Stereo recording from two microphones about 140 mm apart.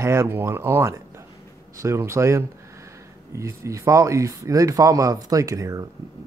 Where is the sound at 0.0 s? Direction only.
20° right (ahead or behind).